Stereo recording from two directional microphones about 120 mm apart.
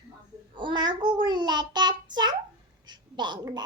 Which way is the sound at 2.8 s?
40° right (ahead or behind).